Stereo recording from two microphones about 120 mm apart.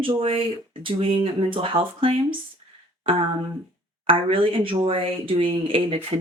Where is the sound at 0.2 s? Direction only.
50° right (ahead or behind).